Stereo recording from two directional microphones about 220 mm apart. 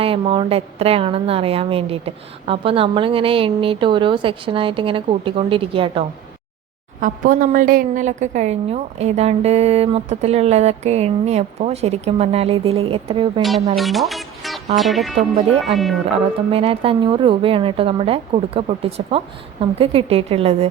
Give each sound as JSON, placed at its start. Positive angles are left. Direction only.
{"t": 0.0, "sound": "a woman's voice", "side_deg": -25}
{"t": 7.0, "sound": "a woman's voice", "side_deg": -40}
{"t": 13.7, "sound": "speech", "side_deg": 0}
{"t": 16.5, "sound": "a woman's voice", "side_deg": -25}